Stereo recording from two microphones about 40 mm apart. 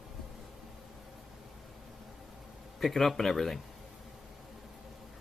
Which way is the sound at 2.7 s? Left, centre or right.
Centre.